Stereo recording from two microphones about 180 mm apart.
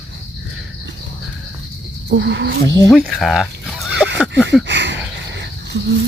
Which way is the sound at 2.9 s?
Centre (ahead or behind).